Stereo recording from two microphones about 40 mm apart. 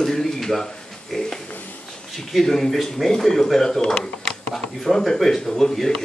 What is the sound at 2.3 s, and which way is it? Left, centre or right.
A man's voice, centre.